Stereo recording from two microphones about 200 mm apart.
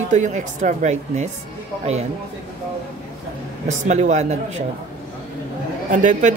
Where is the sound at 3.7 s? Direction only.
35° right (ahead or behind).